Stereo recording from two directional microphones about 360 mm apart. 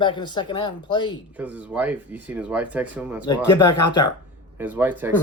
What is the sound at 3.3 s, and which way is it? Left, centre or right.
Speech, centre.